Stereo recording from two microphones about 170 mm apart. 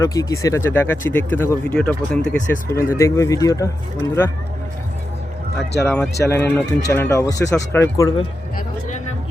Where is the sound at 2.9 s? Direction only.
15° left (ahead or behind).